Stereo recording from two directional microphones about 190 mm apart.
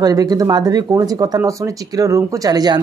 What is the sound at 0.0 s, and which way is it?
Speech, 20° right (ahead or behind).